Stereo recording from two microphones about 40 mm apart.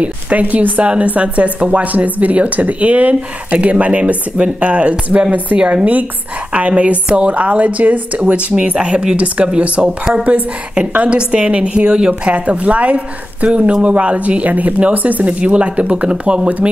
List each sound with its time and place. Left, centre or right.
0.0 s speech: right
5.6 s a woman's voice: right
7.1 s a woman's voice: right
7.3 s speech: right
8.7 s a woman's voice: right
12.3 s a woman's voice: right
16.4 s speech: right